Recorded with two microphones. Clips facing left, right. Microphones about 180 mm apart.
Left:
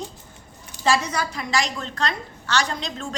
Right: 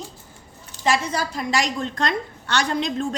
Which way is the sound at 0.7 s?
15° left (ahead or behind).